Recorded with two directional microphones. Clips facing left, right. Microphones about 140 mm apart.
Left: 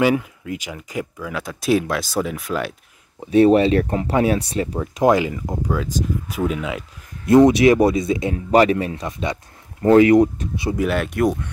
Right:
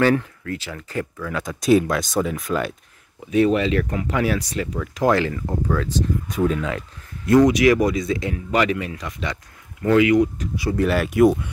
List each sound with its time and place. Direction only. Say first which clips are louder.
0.0 s speech: even; 10° left (ahead or behind)
3.2 s speech: left 5 dB; 35° left (ahead or behind); by 6.8 s 10° left (ahead or behind)
7.2 s speech: left 3 dB; 25° left (ahead or behind)
9.8 s speech: left 4 dB; 35° left (ahead or behind)
10.4 s speech: even; 25° left (ahead or behind)
10.8 s speech: right 4 dB; centre (ahead or behind)